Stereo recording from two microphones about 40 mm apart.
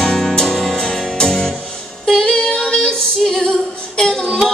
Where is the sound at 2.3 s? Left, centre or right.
Left.